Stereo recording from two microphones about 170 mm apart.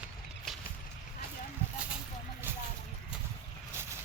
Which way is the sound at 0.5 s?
Centre (ahead or behind).